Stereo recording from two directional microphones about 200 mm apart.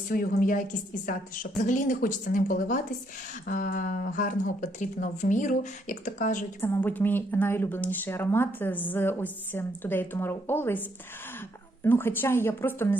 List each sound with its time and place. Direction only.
0.1 s speech: 45° left (ahead or behind)
6.6 s speech: 10° left (ahead or behind)